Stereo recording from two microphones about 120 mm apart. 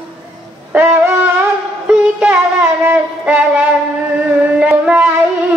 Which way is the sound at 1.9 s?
5° right (ahead or behind).